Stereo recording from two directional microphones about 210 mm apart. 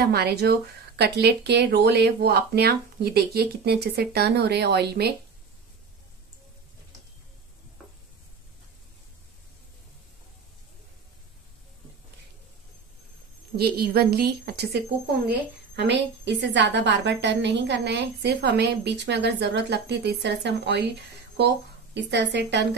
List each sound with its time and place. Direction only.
0.0 s speech: 50° right (ahead or behind)
13.6 s a woman's voice: 50° right (ahead or behind)
21.9 s a woman's voice: 55° right (ahead or behind)